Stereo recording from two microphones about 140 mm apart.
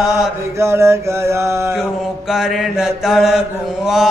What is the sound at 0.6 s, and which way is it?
Mantra, 20° right (ahead or behind).